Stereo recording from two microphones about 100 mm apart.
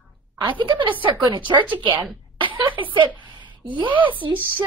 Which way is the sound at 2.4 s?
55° right (ahead or behind).